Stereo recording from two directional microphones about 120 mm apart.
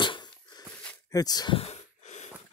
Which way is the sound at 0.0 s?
40° left (ahead or behind).